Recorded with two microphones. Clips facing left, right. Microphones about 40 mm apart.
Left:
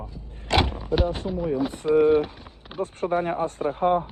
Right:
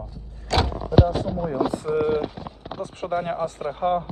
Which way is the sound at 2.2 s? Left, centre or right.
Centre.